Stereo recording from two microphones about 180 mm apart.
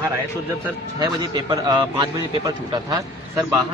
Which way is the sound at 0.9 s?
20° right (ahead or behind).